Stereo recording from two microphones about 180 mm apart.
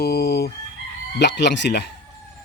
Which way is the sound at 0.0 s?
60° left (ahead or behind).